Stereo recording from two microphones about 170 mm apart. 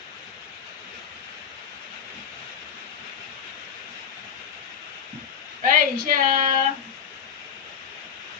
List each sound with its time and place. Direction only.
5.6 s female singing: 55° right (ahead or behind)